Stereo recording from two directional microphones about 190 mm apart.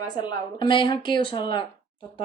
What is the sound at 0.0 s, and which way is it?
A woman's voice, 20° left (ahead or behind).